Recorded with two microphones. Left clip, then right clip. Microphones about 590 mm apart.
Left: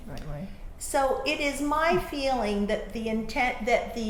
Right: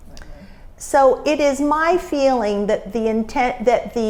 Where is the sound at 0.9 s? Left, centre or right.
Right.